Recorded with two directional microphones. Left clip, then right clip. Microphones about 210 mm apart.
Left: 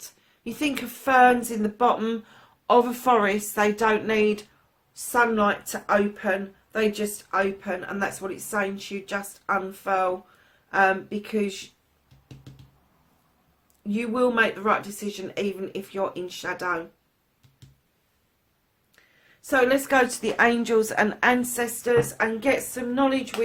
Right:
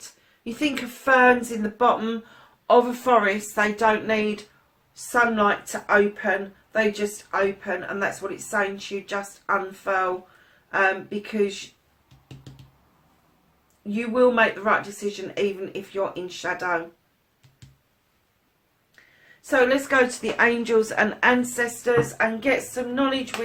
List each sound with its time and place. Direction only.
0.4 s speech: 45° left (ahead or behind)
13.9 s speech: 45° left (ahead or behind)
19.5 s a woman's voice: 45° left (ahead or behind)